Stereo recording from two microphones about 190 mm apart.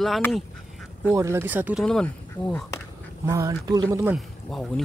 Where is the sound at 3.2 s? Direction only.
15° right (ahead or behind).